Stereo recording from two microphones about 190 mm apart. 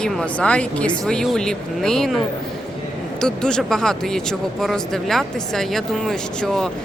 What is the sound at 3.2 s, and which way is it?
Speech, 5° left (ahead or behind).